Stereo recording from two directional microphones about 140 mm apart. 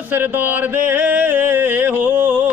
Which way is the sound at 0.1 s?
15° right (ahead or behind).